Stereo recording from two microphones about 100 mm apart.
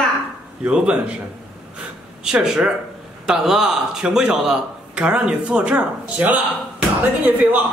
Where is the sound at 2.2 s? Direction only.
5° right (ahead or behind).